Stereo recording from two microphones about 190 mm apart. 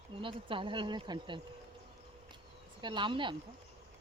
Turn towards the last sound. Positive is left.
turn(degrees=-25)  # may be behind; listen again after turning